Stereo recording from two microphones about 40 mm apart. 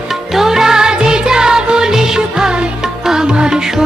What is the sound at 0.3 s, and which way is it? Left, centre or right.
Music, centre.